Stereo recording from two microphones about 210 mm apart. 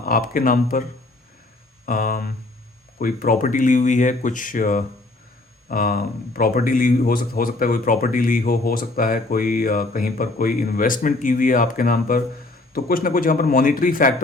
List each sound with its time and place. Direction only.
0.0 s speech: 40° left (ahead or behind)